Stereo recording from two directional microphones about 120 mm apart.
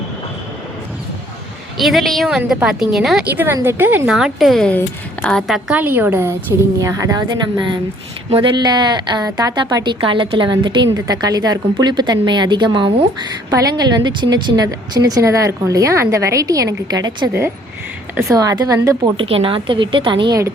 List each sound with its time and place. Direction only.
1.8 s a woman's voice: centre (ahead or behind)
3.3 s a woman's voice: 20° right (ahead or behind)
4.1 s a woman's voice: centre (ahead or behind)
5.7 s a woman's voice: 15° right (ahead or behind)
6.8 s a woman's voice: 30° right (ahead or behind)
8.3 s a woman's voice: 45° right (ahead or behind)
18.3 s a woman's voice: 30° right (ahead or behind)
19.1 s a woman's voice: 50° right (ahead or behind)